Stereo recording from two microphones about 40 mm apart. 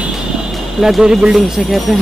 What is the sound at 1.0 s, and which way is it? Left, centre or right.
Speech, centre.